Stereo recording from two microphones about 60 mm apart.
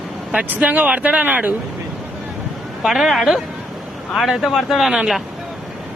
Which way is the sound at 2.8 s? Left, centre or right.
Centre.